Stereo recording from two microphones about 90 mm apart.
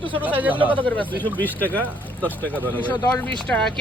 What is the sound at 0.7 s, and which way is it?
Speech, 20° left (ahead or behind).